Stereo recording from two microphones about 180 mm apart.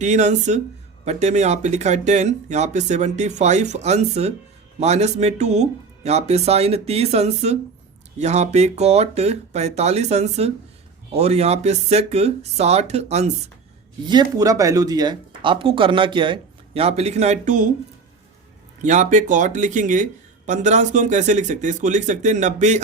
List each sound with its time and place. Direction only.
0.0 s speech: 40° right (ahead or behind)
14.1 s speech: 20° right (ahead or behind); by 17.7 s 45° right (ahead or behind)
18.8 s speech: 45° right (ahead or behind)